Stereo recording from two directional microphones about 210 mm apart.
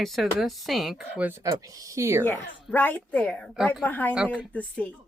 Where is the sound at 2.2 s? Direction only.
10° left (ahead or behind).